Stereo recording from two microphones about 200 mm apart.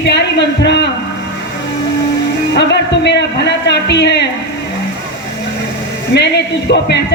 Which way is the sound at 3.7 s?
60° left (ahead or behind).